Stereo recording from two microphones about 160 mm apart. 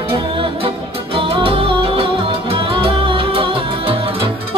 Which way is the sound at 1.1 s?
35° right (ahead or behind).